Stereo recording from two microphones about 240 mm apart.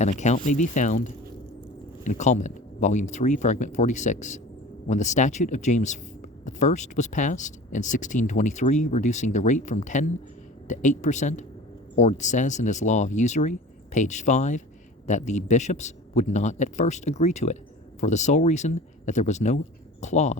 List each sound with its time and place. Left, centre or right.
0.0 s speech: left